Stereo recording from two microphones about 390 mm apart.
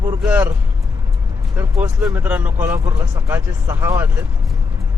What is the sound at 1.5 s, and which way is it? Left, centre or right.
Speech, centre.